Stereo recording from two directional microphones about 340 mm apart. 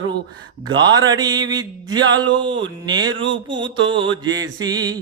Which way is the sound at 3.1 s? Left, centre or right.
Right.